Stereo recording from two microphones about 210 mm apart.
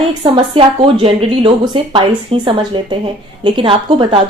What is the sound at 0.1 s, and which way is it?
Speech, 25° right (ahead or behind).